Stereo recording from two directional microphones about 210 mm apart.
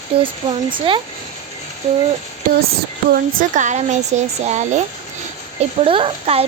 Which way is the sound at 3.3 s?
35° right (ahead or behind).